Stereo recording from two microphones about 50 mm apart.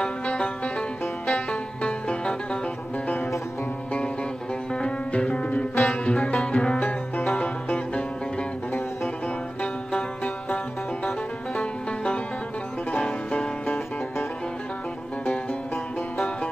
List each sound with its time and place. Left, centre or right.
0.0 s music: centre
4.7 s music: centre
9.6 s music: left